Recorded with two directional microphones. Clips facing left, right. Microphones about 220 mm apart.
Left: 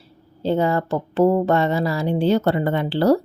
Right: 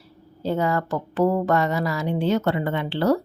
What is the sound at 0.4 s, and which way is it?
Speech, 30° left (ahead or behind).